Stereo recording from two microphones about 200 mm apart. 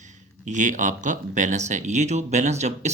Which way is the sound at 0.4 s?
40° right (ahead or behind).